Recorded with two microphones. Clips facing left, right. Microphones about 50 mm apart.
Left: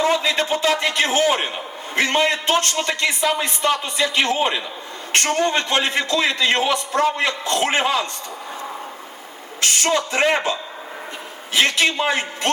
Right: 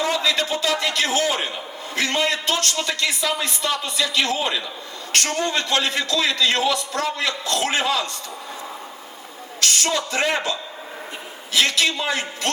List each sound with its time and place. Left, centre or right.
0.0 s a man's voice: left
9.6 s a man's voice: left